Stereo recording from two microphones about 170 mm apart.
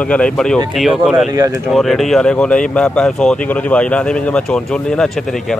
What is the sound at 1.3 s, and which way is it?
Speech, 20° right (ahead or behind).